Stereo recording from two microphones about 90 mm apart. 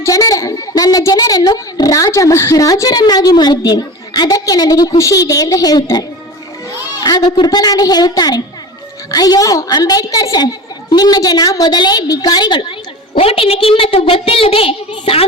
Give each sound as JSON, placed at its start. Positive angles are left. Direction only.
{"t": 0.0, "sound": "a child's voice", "side_deg": 40}
{"t": 13.1, "sound": "a child's voice", "side_deg": 90}